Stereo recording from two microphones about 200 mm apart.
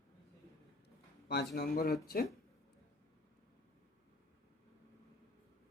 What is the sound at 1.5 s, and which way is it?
Speech, 50° left (ahead or behind).